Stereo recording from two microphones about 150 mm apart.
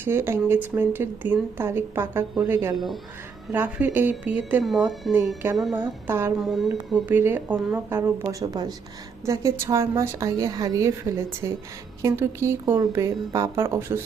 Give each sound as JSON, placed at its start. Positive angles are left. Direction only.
{"t": 0.0, "sound": "speech", "side_deg": -15}
{"t": 2.7, "sound": "speech", "side_deg": 0}
{"t": 3.5, "sound": "speech", "side_deg": -15}
{"t": 5.7, "sound": "speech", "side_deg": -15}
{"t": 6.4, "sound": "a woman's voice", "side_deg": 0}